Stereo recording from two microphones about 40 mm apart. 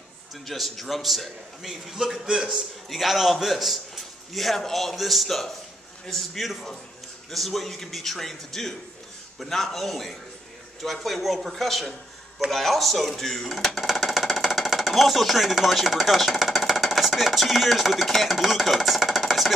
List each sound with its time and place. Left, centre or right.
0.5 s a man's voice: centre
2.9 s a man's voice: centre